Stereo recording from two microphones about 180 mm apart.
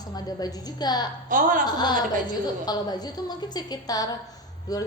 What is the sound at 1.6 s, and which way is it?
A woman's voice, 25° left (ahead or behind).